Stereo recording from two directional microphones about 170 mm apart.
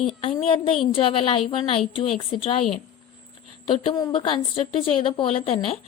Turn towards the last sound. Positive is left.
turn(degrees=35)  # may be behind; listen again after turning